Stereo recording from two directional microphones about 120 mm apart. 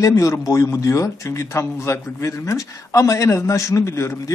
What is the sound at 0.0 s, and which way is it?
A man's voice, 25° left (ahead or behind).